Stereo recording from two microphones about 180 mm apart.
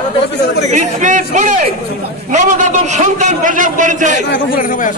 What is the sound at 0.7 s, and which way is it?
A man's voice, 40° right (ahead or behind).